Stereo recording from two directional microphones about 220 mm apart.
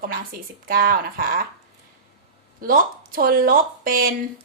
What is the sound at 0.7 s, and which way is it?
Speech, 40° right (ahead or behind).